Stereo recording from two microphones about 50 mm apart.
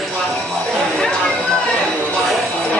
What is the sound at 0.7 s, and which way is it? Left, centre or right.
Chatter, centre.